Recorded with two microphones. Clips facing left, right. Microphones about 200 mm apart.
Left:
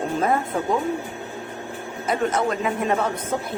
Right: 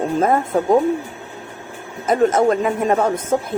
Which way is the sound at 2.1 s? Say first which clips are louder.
Right 8 dB; 45° right (ahead or behind).